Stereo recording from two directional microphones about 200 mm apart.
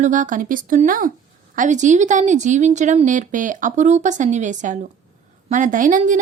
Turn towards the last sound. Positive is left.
turn(degrees=-40)  # may be behind; listen again after turning